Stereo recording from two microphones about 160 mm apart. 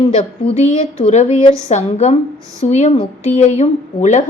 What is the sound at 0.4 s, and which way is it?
A woman's voice, 45° left (ahead or behind).